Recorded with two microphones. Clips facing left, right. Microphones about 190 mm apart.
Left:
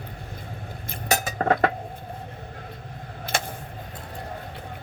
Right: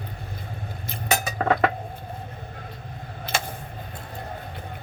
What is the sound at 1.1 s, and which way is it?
Cutlery, 40° left (ahead or behind).